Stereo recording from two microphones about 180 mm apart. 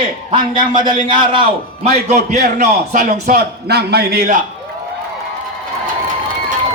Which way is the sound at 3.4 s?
65° right (ahead or behind).